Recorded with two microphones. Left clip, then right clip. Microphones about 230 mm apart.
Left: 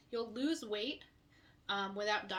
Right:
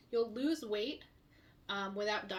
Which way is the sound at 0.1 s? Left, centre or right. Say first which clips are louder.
Right 3 dB; centre.